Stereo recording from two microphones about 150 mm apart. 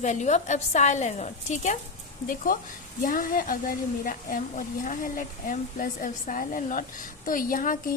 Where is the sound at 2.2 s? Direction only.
70° left (ahead or behind).